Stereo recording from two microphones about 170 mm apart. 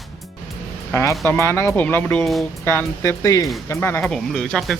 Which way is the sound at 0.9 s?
15° left (ahead or behind).